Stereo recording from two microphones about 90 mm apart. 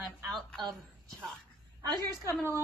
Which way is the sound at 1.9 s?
50° right (ahead or behind).